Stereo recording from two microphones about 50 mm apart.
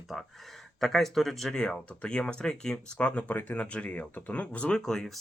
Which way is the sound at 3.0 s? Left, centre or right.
Left.